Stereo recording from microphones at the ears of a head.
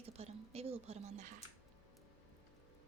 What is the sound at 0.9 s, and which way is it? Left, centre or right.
Speech, right.